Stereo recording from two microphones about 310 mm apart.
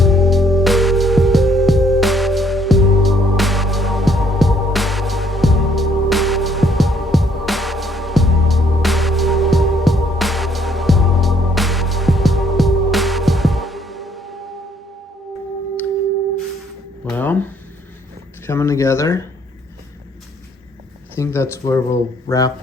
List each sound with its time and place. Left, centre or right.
0.0 s music: centre
17.1 s a sound: centre
21.2 s speech: centre